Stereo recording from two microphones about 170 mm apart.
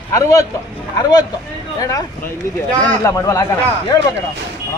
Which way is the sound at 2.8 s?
15° left (ahead or behind).